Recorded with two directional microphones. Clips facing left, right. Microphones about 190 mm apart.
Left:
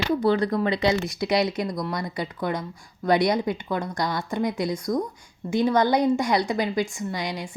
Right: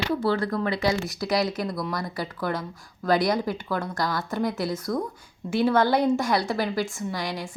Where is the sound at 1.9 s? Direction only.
20° left (ahead or behind).